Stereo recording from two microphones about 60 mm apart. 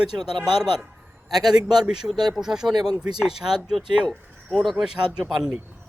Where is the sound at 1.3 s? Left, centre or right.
Right.